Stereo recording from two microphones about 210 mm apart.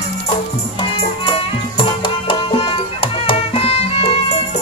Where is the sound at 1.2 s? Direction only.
25° left (ahead or behind).